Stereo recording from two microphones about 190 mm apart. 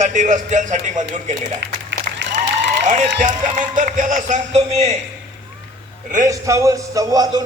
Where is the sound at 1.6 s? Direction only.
65° right (ahead or behind).